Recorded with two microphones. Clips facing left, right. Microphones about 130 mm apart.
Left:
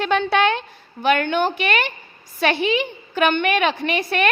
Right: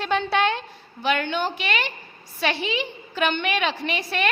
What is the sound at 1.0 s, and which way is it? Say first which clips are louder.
A woman's voice: left 5 dB; 55° left (ahead or behind).